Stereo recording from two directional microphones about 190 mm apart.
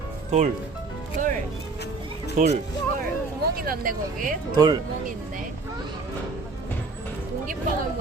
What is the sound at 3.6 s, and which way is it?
Speech, 50° right (ahead or behind).